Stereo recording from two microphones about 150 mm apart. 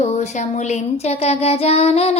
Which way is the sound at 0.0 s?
55° left (ahead or behind).